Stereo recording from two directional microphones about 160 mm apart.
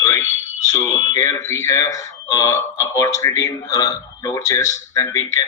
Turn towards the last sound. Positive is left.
turn(degrees=20)  # may be behind; listen again after turning